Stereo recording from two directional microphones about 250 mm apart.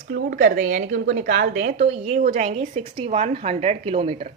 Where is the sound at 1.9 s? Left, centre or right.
Right.